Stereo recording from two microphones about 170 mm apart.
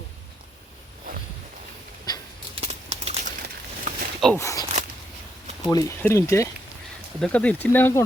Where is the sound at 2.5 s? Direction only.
35° right (ahead or behind).